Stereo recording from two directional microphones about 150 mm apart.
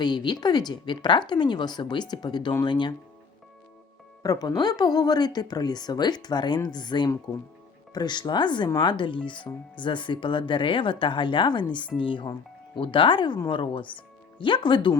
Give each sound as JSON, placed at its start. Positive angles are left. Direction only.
{"t": 0.0, "sound": "speech", "side_deg": 30}
{"t": 4.2, "sound": "speech", "side_deg": 25}